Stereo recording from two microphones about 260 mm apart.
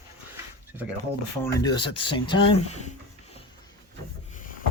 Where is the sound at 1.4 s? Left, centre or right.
Centre.